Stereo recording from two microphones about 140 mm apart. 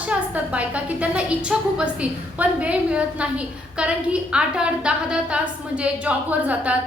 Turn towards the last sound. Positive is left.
turn(degrees=-10)  # may be behind; listen again after turning